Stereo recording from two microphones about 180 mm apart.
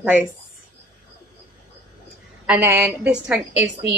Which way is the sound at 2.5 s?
10° right (ahead or behind).